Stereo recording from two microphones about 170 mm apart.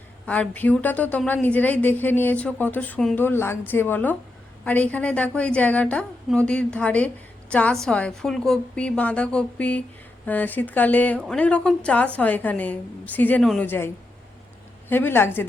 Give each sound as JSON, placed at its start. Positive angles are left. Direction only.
{"t": 0.3, "sound": "a woman's voice", "side_deg": 10}